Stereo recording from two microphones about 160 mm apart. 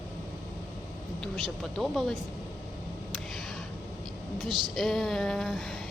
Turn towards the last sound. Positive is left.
turn(degrees=0)  # may be behind; listen again after turning